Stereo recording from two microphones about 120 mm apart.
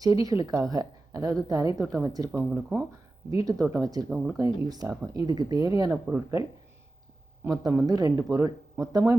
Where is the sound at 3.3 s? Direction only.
30° right (ahead or behind).